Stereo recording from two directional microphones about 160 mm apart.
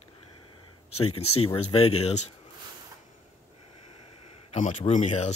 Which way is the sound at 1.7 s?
40° left (ahead or behind).